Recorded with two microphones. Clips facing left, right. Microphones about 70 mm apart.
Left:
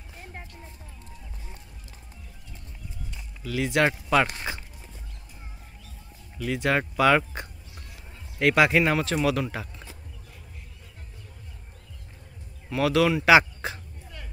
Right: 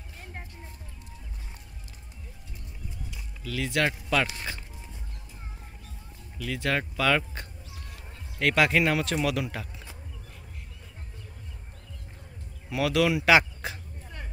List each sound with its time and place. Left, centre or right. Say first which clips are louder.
3.4 s speech: left 4 dB; centre
6.3 s speech: left 4 dB; left
8.4 s a man's voice: left 3 dB; centre
12.6 s speech: left 2 dB; centre